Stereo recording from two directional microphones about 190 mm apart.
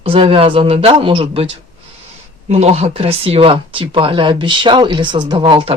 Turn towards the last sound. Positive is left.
turn(degrees=-25)  # may be behind; listen again after turning